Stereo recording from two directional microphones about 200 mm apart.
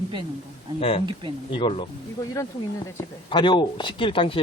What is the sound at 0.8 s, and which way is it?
Speech, 30° left (ahead or behind).